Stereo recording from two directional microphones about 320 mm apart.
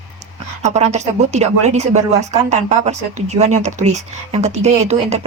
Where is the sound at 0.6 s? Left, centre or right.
Right.